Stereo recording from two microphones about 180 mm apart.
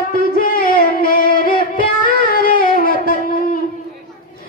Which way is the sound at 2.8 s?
50° left (ahead or behind).